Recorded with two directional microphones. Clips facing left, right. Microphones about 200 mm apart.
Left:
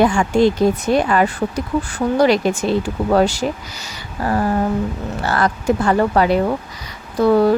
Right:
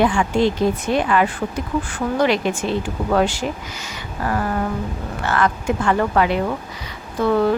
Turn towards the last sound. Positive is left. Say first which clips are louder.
# left 4 dB
turn(degrees=35)  # may be behind; listen again after turning